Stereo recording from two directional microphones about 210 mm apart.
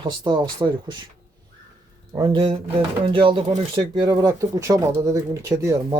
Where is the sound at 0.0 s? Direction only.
20° right (ahead or behind).